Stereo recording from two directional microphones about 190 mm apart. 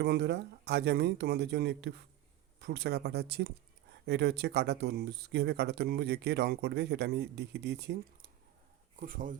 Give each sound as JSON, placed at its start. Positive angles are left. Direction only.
{"t": 0.0, "sound": "speech", "side_deg": -60}
{"t": 9.0, "sound": "speech", "side_deg": -45}